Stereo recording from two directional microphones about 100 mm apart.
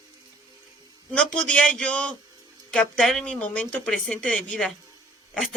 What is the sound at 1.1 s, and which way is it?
Speech, 10° left (ahead or behind).